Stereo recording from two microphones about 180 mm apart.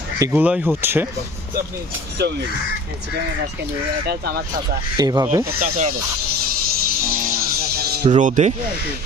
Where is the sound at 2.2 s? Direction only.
70° right (ahead or behind).